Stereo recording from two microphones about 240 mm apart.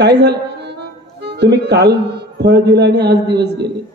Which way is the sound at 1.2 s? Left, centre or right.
Right.